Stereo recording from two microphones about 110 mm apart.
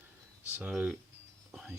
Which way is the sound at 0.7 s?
5° right (ahead or behind).